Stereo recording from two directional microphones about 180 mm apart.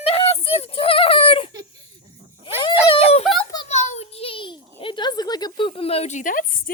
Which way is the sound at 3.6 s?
40° left (ahead or behind).